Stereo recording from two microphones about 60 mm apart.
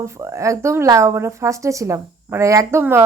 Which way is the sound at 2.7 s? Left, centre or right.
Right.